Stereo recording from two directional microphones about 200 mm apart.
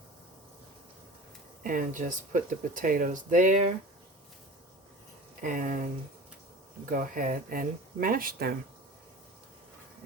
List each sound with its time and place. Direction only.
1.6 s speech: 40° right (ahead or behind)
5.4 s speech: 40° right (ahead or behind)
6.9 s speech: 45° right (ahead or behind)